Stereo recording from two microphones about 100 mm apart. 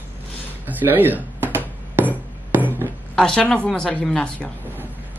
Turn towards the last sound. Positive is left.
turn(degrees=10)  # may be behind; listen again after turning